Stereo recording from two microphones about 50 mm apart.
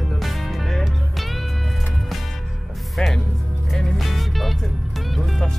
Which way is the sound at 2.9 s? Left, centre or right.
Centre.